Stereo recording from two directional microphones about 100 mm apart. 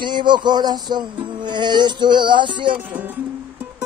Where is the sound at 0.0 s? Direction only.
50° right (ahead or behind).